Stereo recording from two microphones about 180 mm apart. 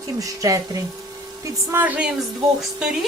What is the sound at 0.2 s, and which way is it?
Speech, 20° right (ahead or behind).